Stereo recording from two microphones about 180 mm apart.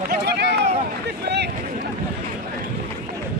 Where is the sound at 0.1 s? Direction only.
65° right (ahead or behind).